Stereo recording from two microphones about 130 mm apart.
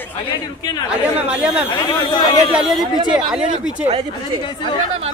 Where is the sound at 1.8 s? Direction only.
35° left (ahead or behind).